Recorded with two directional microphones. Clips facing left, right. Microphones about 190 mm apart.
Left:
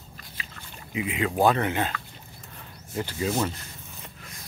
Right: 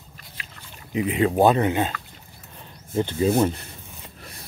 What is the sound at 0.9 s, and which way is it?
Speech, 35° right (ahead or behind).